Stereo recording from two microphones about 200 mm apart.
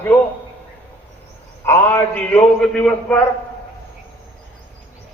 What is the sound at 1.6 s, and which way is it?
Mantra, 10° left (ahead or behind).